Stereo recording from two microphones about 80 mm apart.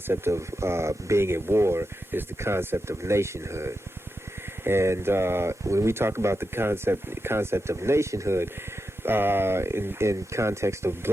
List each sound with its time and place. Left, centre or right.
0.1 s speech: right